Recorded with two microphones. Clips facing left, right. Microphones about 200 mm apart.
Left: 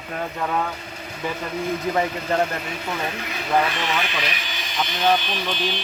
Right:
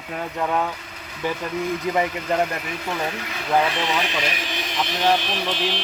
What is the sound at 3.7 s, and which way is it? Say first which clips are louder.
Speech: right 2 dB; 15° right (ahead or behind).